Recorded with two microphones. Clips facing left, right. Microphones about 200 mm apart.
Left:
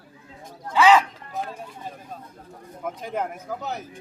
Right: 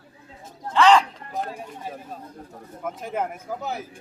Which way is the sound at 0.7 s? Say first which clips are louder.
Even; 5° left (ahead or behind).